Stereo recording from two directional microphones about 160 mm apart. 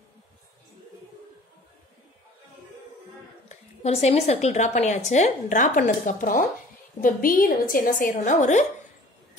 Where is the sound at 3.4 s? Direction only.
45° left (ahead or behind).